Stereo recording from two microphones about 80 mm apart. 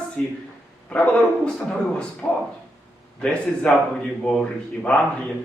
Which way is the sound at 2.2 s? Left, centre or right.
Centre.